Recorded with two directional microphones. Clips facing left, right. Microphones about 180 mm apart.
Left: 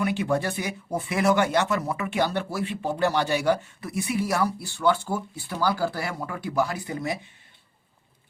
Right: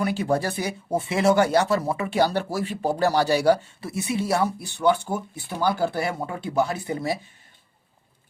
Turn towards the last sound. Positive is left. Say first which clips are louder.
# right 3 dB
turn(degrees=-30)  # may be behind; listen again after turning